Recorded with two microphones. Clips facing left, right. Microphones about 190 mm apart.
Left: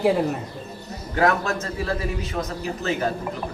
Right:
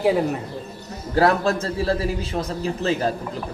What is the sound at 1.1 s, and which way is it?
A man's voice, 35° right (ahead or behind).